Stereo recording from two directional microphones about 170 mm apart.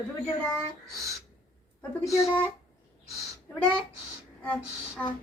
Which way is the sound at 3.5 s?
5° left (ahead or behind).